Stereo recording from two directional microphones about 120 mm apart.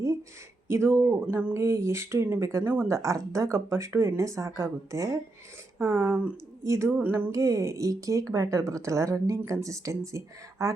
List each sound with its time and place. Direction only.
0.9 s speech: 20° right (ahead or behind)